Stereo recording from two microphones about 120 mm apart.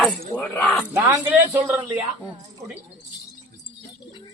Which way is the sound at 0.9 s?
30° right (ahead or behind).